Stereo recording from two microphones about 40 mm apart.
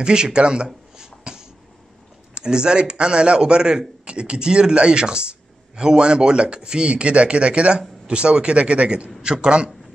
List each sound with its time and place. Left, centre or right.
0.0 s speech: right
0.9 s beatboxing: centre
2.3 s speech: centre